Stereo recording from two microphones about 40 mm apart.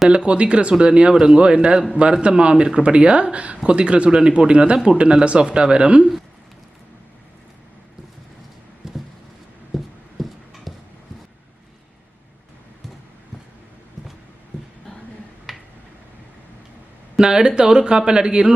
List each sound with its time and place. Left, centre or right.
0.1 s speech: right
8.8 s a sound: centre
15.5 s tick-tock: centre
17.2 s speech: centre